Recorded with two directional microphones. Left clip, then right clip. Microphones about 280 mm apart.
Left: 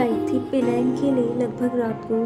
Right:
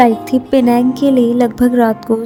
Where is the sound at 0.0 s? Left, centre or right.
Right.